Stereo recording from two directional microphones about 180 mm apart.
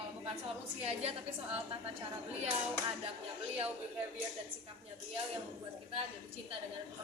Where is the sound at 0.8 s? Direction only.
35° right (ahead or behind).